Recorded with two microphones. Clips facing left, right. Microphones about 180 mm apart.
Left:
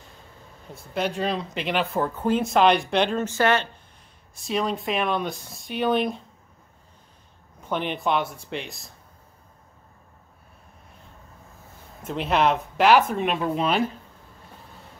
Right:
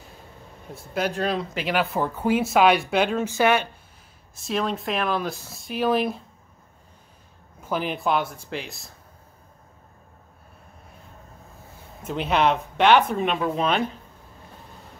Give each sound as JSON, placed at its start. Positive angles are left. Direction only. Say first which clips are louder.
{"t": 0.9, "sound": "speech", "louder": "right 1 dB", "side_deg": 0}
{"t": 4.4, "sound": "speech", "louder": "even", "side_deg": 0}
{"t": 7.6, "sound": "speech", "louder": "right 1 dB", "side_deg": -5}
{"t": 12.0, "sound": "speech", "louder": "even", "side_deg": 0}